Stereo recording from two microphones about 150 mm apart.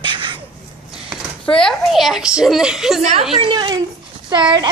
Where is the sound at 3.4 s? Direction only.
30° right (ahead or behind).